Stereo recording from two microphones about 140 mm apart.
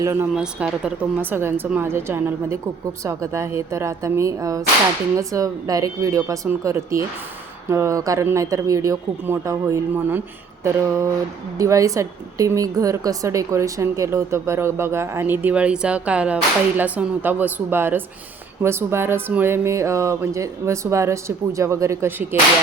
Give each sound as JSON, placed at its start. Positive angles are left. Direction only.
{"t": 0.0, "sound": "a woman's voice", "side_deg": -20}
{"t": 0.3, "sound": "a woman's voice", "side_deg": -5}